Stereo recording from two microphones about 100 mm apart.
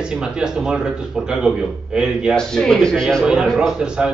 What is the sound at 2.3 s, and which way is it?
A man's voice, 5° left (ahead or behind).